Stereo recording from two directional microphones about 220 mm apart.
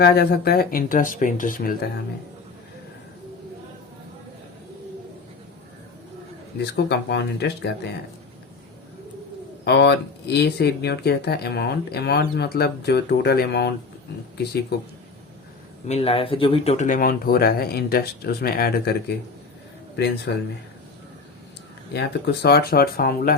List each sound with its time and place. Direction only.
0.0 s speech: 45° left (ahead or behind)
6.6 s speech: 50° left (ahead or behind)
9.6 s speech: 50° left (ahead or behind)
15.9 s speech: 25° left (ahead or behind); by 18.9 s 45° left (ahead or behind)
20.3 s speech: 50° left (ahead or behind)
21.9 s speech: 50° left (ahead or behind)